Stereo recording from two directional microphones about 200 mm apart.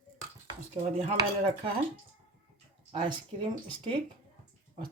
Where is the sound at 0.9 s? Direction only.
30° right (ahead or behind).